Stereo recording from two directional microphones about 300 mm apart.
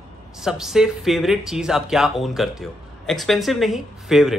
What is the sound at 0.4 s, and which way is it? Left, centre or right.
Speech, centre.